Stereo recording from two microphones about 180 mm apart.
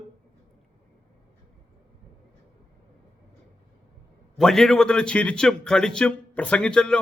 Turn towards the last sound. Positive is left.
turn(degrees=5)  # may be behind; listen again after turning